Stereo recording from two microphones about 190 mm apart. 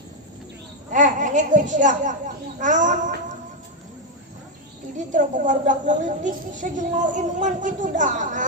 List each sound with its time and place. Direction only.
0.9 s speech: 40° right (ahead or behind)
4.9 s speech: 40° right (ahead or behind)